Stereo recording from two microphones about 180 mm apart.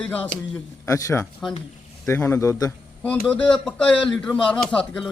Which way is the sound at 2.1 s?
15° left (ahead or behind).